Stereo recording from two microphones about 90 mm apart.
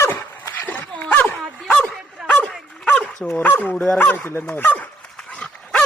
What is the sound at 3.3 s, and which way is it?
Speech, 20° left (ahead or behind).